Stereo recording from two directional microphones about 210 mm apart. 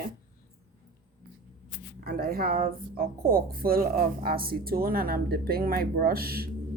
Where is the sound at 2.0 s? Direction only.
45° right (ahead or behind).